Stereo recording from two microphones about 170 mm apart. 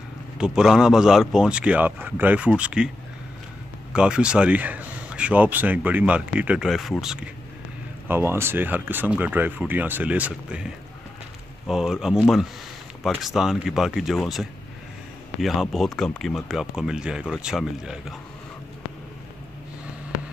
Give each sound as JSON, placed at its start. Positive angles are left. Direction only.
{"t": 0.4, "sound": "speech", "side_deg": -5}
{"t": 3.9, "sound": "speech", "side_deg": -5}
{"t": 8.1, "sound": "speech", "side_deg": -15}